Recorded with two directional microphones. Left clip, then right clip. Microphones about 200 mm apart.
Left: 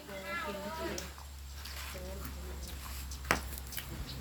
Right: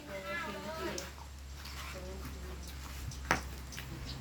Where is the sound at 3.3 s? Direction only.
25° left (ahead or behind).